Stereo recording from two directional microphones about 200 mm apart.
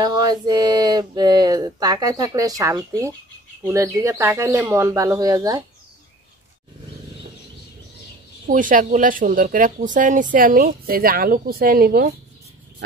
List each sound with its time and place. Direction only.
0.0 s speech: 20° right (ahead or behind)
8.5 s speech: 40° right (ahead or behind)